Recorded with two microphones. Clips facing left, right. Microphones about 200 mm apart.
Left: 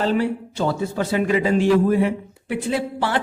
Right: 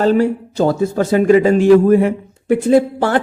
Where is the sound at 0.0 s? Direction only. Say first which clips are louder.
Right 7 dB; 45° right (ahead or behind).